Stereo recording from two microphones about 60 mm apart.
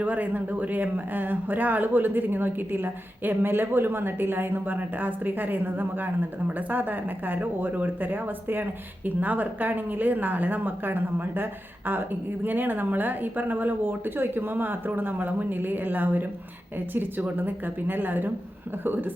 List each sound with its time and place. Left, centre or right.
0.0 s speech: right
12.5 s speech: right